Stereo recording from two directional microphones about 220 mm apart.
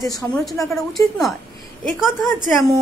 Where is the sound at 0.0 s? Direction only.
15° left (ahead or behind).